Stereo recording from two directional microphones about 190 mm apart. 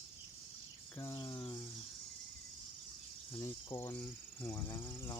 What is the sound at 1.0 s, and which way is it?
Cricket, 20° left (ahead or behind).